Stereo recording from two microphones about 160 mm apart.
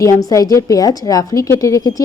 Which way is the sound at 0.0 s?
20° left (ahead or behind).